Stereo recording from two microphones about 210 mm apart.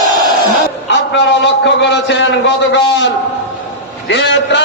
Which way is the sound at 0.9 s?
60° left (ahead or behind).